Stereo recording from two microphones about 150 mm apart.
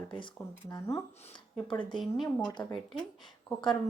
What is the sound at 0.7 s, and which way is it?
Speech, 25° left (ahead or behind).